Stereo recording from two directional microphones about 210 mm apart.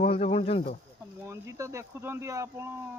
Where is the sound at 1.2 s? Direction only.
15° right (ahead or behind).